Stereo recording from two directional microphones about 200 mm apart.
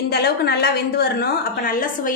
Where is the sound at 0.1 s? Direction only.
50° left (ahead or behind).